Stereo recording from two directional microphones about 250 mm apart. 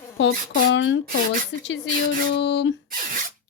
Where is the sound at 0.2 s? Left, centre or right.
Left.